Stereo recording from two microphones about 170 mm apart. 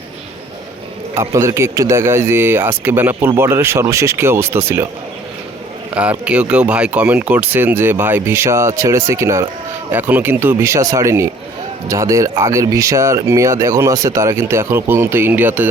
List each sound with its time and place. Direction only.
1.1 s speech: 15° right (ahead or behind)
5.9 s speech: 5° right (ahead or behind)